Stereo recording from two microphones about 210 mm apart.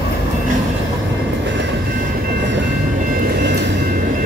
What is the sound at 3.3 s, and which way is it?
Train, 55° right (ahead or behind).